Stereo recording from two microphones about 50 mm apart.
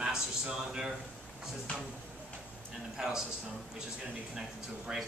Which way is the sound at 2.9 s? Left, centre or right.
Centre.